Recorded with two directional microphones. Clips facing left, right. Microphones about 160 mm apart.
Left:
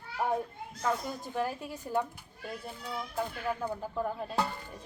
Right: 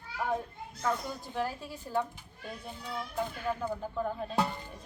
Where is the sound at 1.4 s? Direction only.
15° left (ahead or behind).